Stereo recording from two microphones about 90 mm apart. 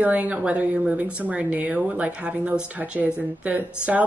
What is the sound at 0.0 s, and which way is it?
Speech, 15° right (ahead or behind).